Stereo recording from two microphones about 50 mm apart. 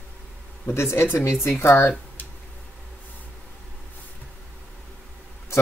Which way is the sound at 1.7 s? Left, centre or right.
Left.